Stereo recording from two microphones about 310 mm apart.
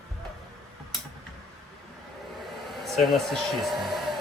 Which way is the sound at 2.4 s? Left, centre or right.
Centre.